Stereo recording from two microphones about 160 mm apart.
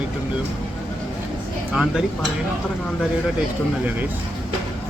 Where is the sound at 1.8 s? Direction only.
5° right (ahead or behind).